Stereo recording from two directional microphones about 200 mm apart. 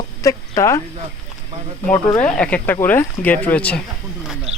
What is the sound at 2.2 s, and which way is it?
Speech, 5° left (ahead or behind).